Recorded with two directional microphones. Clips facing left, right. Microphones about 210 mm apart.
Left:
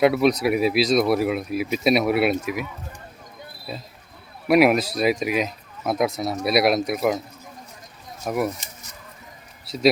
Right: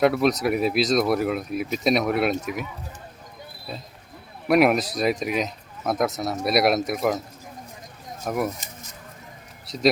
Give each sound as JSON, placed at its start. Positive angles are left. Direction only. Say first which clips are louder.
{"t": 0.0, "sound": "speech", "louder": "left 2 dB", "side_deg": 0}
{"t": 3.7, "sound": "speech", "louder": "left 2 dB", "side_deg": 5}
{"t": 8.2, "sound": "speech", "louder": "left 2 dB", "side_deg": 5}